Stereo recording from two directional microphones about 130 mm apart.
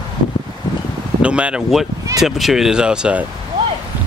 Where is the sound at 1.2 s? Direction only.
10° right (ahead or behind).